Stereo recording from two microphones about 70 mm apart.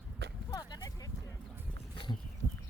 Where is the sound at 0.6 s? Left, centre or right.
Left.